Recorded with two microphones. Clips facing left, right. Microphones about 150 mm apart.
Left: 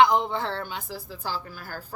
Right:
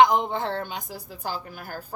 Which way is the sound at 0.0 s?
20° right (ahead or behind).